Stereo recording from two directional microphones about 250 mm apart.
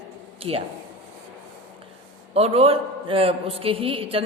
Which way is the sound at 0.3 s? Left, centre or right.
Right.